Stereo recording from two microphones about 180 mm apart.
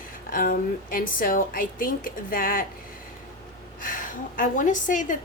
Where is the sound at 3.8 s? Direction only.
50° left (ahead or behind).